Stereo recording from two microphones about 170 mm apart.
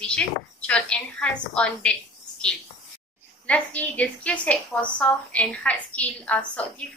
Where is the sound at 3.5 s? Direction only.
10° left (ahead or behind).